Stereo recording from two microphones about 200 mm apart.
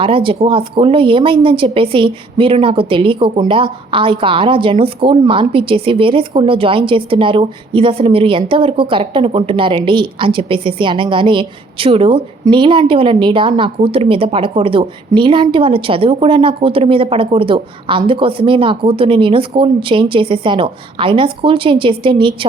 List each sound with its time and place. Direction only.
0.0 s a woman's voice: 25° right (ahead or behind)